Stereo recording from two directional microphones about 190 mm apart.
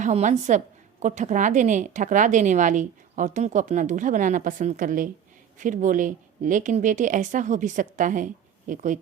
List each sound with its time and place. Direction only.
0.0 s a woman's voice: 40° right (ahead or behind)